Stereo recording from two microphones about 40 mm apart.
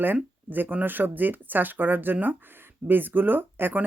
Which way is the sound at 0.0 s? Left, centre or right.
Right.